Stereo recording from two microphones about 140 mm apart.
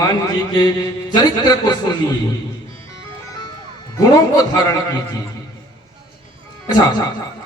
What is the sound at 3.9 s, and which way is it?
Speech, 25° left (ahead or behind).